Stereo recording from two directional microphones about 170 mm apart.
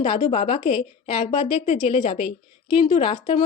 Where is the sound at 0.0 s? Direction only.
35° left (ahead or behind).